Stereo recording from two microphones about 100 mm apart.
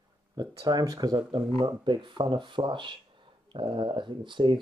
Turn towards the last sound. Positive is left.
turn(degrees=-50)  # may be behind; listen again after turning